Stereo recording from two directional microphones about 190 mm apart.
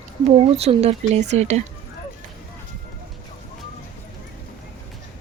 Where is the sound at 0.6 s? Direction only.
35° right (ahead or behind).